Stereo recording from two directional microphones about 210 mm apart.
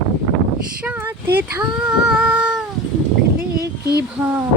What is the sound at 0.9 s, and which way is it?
Cat, 10° right (ahead or behind).